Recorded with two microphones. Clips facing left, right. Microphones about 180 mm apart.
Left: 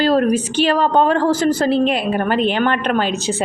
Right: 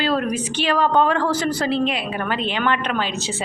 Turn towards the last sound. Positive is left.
turn(degrees=50)  # may be behind; listen again after turning